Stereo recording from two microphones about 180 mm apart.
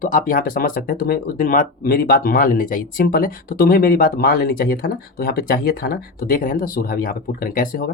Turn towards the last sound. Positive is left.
turn(degrees=50)  # may be behind; listen again after turning